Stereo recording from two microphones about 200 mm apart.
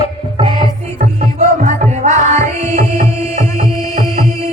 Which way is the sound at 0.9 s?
35° right (ahead or behind).